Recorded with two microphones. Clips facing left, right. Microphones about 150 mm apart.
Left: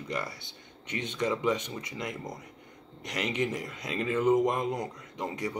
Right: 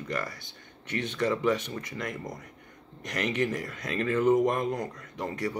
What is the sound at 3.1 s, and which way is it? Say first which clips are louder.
Speech: right 2 dB; 15° left (ahead or behind).